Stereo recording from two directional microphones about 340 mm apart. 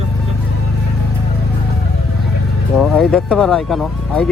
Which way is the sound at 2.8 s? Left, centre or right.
Centre.